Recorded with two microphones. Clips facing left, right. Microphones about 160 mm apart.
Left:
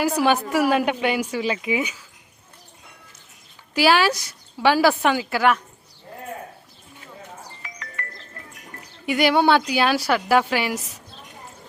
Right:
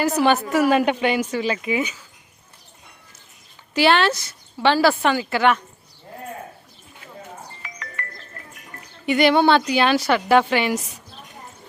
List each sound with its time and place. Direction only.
0.2 s a woman's voice: 10° left (ahead or behind)
3.8 s a woman's voice: 5° left (ahead or behind)
8.0 s music: 65° right (ahead or behind)
9.0 s a woman's voice: 10° left (ahead or behind)